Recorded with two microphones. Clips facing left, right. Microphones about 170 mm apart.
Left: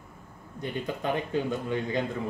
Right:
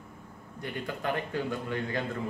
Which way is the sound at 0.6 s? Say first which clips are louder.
Left 3 dB; 20° left (ahead or behind).